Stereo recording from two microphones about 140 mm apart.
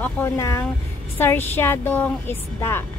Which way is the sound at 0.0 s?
20° left (ahead or behind).